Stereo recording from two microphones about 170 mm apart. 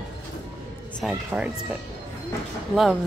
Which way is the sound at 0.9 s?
5° right (ahead or behind).